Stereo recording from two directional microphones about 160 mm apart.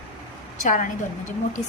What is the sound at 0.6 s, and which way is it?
Speech, 55° left (ahead or behind).